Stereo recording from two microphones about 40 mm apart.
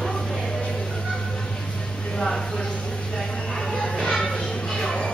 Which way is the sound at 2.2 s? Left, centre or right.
Centre.